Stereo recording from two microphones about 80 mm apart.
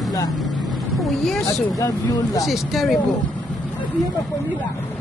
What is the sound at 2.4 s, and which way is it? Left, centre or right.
Speech, centre.